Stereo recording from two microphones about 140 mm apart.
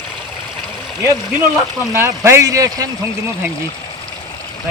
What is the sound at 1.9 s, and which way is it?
Speech, 20° right (ahead or behind).